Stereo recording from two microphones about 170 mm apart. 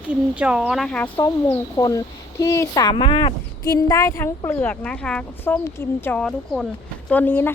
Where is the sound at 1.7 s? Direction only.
20° left (ahead or behind).